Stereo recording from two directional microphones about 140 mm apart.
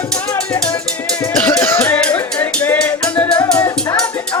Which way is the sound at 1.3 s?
10° left (ahead or behind).